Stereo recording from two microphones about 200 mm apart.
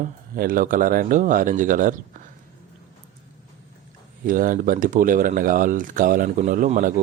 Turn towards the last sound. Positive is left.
turn(degrees=-40)  # may be behind; listen again after turning